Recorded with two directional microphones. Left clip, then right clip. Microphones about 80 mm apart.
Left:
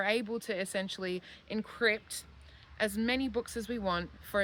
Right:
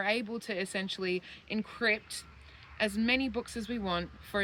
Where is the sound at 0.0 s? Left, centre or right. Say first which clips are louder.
Even; left.